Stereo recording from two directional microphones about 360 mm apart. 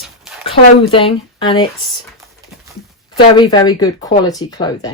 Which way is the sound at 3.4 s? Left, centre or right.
Centre.